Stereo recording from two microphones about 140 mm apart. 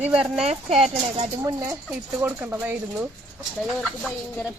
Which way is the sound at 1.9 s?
10° right (ahead or behind).